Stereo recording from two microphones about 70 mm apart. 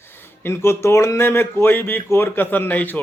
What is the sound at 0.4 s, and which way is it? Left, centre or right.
Speech, left.